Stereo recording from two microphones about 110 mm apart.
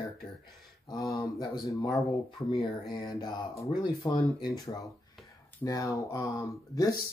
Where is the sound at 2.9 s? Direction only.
35° left (ahead or behind).